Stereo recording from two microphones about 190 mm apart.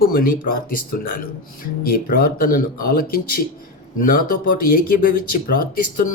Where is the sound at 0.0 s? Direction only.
50° left (ahead or behind).